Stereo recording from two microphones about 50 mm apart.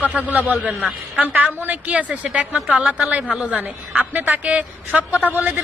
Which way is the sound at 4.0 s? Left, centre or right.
Right.